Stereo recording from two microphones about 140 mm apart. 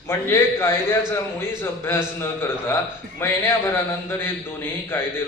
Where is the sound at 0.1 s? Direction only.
15° left (ahead or behind).